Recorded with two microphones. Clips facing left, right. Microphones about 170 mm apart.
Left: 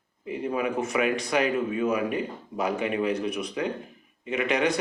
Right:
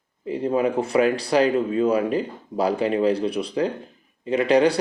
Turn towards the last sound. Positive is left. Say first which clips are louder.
# right 7 dB
turn(degrees=-35)  # may be behind; listen again after turning